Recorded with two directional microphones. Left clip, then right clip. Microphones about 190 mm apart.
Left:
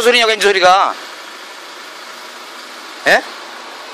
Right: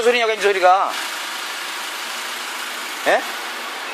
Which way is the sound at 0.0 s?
50° left (ahead or behind).